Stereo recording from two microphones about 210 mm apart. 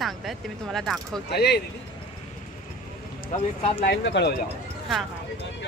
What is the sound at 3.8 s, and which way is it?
Speech, 55° left (ahead or behind).